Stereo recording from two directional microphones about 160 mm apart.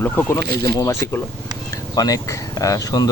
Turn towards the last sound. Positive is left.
turn(degrees=25)  # may be behind; listen again after turning